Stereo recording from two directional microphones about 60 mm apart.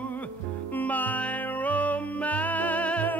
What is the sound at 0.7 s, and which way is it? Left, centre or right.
Music, left.